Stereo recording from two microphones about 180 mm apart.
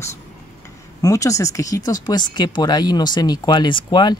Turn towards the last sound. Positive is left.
turn(degrees=25)  # may be behind; listen again after turning